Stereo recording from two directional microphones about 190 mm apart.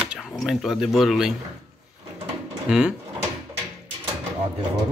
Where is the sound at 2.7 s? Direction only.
5° right (ahead or behind).